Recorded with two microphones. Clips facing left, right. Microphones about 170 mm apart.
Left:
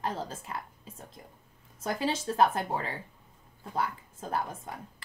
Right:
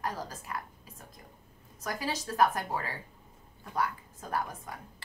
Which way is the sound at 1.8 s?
25° left (ahead or behind).